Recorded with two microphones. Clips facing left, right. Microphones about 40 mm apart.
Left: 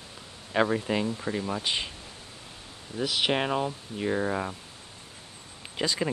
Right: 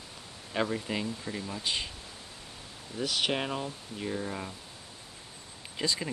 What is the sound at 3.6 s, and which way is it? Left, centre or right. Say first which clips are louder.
Speech: left 6 dB; left.